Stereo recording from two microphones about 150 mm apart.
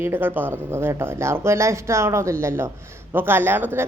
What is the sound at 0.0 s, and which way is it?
A woman's voice, 15° right (ahead or behind).